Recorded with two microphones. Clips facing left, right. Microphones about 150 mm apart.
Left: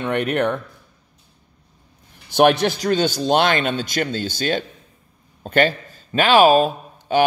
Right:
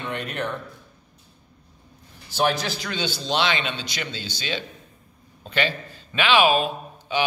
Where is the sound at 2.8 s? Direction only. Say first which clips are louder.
Left 10 dB; 45° left (ahead or behind).